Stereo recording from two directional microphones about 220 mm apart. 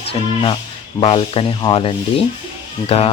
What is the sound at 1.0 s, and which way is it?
Speech, 25° left (ahead or behind).